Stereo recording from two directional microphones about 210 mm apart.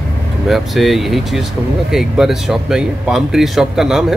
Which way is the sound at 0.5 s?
Centre (ahead or behind).